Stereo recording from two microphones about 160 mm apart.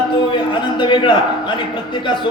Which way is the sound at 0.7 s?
30° left (ahead or behind).